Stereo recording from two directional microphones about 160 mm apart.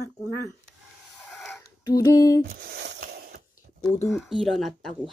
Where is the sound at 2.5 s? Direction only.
80° right.